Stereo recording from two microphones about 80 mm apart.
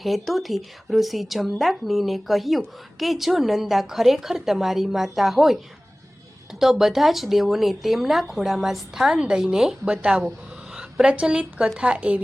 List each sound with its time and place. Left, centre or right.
0.0 s speech: centre
6.6 s a woman's voice: centre